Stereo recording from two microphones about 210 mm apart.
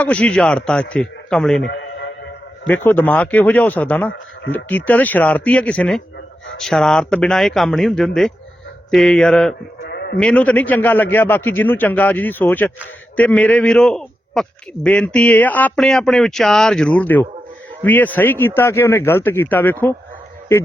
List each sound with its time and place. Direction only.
0.0 s speech: 5° left (ahead or behind)
1.6 s music: 60° left (ahead or behind)
2.6 s a man's voice: 10° left (ahead or behind)
9.8 s sheep: 50° left (ahead or behind)
10.2 s a man's voice: 5° left (ahead or behind)